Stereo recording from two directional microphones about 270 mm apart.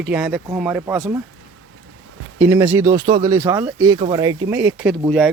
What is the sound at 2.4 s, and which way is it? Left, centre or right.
Speech, centre.